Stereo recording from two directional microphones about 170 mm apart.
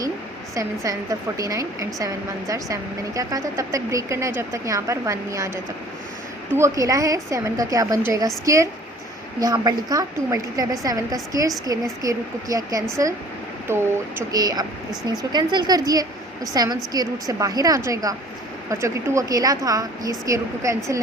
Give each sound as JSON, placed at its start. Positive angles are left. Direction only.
{"t": 1.4, "sound": "a woman's voice", "side_deg": -20}
{"t": 6.6, "sound": "a woman's voice", "side_deg": -20}